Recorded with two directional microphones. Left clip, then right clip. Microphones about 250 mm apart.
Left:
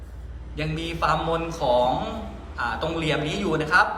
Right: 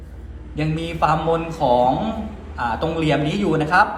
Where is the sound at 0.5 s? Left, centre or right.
Centre.